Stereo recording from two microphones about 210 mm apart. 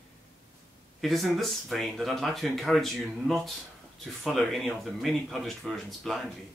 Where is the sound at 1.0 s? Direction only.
Centre (ahead or behind).